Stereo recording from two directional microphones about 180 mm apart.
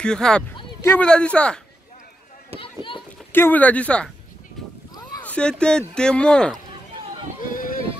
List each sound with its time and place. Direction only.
0.0 s speech: 5° left (ahead or behind)
2.6 s run: 30° left (ahead or behind)
3.3 s speech: 10° left (ahead or behind)
5.2 s speech: 5° left (ahead or behind)
7.4 s a sound: 50° left (ahead or behind)